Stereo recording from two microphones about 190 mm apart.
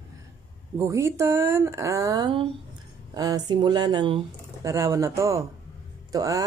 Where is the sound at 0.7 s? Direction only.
15° right (ahead or behind).